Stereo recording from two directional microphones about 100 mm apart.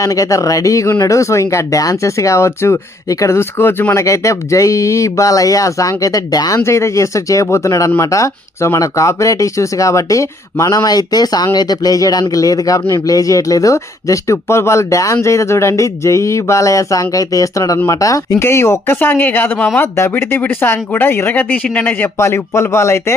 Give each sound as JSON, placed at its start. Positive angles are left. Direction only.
{"t": 0.0, "sound": "speech", "side_deg": 35}
{"t": 6.6, "sound": "speech", "side_deg": 30}